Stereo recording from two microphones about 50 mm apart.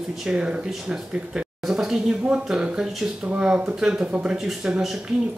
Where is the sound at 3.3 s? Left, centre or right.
Right.